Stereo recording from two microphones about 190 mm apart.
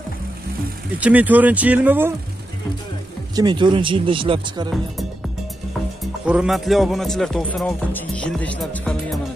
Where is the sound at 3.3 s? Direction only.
20° right (ahead or behind).